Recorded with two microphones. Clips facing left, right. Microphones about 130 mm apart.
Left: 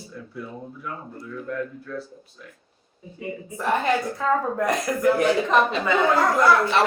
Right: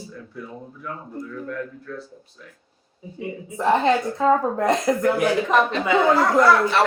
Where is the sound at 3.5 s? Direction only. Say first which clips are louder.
Right 4 dB; 20° right (ahead or behind).